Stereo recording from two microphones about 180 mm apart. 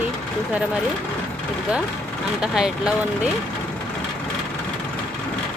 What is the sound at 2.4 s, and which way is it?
Speech, 5° right (ahead or behind).